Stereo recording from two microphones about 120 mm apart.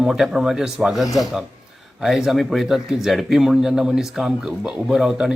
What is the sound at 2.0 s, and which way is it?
Speech, 5° right (ahead or behind).